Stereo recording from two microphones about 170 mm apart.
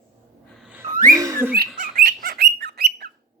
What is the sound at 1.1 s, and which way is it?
Bird, 20° right (ahead or behind).